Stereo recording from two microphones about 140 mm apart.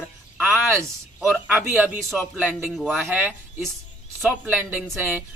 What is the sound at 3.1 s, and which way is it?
Speech, 10° right (ahead or behind).